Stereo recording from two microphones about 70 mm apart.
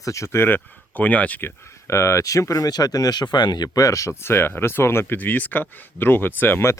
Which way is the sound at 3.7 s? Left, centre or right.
Left.